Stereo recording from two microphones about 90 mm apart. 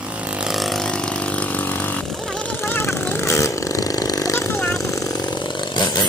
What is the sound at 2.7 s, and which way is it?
Vehicle, 30° left (ahead or behind).